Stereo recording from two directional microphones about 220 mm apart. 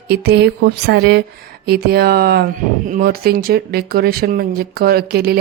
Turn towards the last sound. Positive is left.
turn(degrees=-45)  # may be behind; listen again after turning